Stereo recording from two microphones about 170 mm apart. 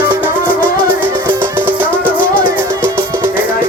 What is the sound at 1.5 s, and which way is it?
Music, 10° right (ahead or behind).